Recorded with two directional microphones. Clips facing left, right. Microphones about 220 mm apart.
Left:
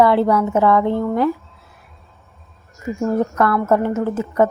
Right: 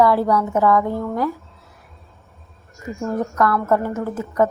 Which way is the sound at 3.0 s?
25° left (ahead or behind).